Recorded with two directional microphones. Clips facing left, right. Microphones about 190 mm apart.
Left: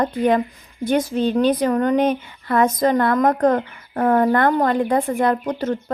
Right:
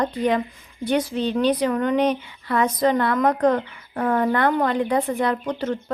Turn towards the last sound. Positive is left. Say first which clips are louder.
# left 3 dB
turn(degrees=45)  # may be behind; listen again after turning